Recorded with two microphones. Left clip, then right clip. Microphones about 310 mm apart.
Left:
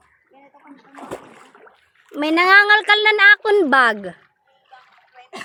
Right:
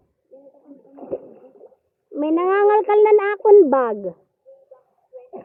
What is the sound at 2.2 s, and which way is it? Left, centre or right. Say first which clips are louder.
Speech: left 5 dB; centre.